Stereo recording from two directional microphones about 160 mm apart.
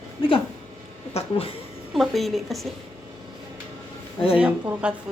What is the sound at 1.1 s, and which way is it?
Speech, 40° left (ahead or behind).